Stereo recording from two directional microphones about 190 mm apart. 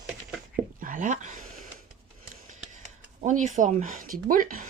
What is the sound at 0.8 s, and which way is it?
Speech, 40° right (ahead or behind).